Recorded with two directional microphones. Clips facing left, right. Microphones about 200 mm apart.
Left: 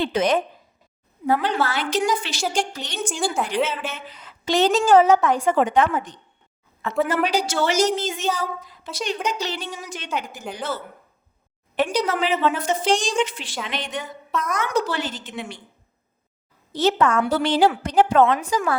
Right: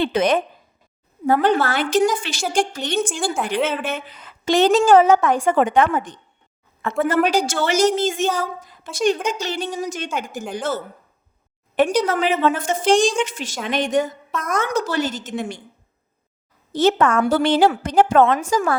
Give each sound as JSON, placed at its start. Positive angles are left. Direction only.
{"t": 0.0, "sound": "speech", "side_deg": -60}
{"t": 1.3, "sound": "a woman's voice", "side_deg": -50}
{"t": 3.1, "sound": "a woman's voice", "side_deg": 0}
{"t": 3.6, "sound": "a woman's voice", "side_deg": -55}
{"t": 11.8, "sound": "a woman's voice", "side_deg": -50}
{"t": 16.7, "sound": "a woman's voice", "side_deg": -50}